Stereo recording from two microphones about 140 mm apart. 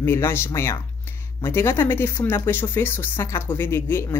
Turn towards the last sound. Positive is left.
turn(degrees=15)  # may be behind; listen again after turning